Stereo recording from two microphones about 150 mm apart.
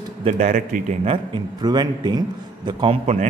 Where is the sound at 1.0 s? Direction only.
30° right (ahead or behind).